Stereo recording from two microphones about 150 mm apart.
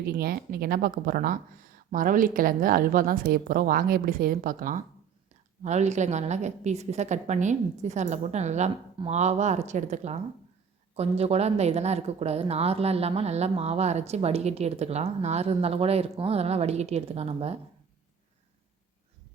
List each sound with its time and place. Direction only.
0.0 s a woman's voice: 90° right; by 4.8 s 65° right (ahead or behind)
5.6 s a woman's voice: 50° right (ahead or behind)